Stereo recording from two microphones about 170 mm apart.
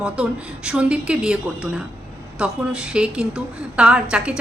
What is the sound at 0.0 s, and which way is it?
A woman's voice, 5° right (ahead or behind).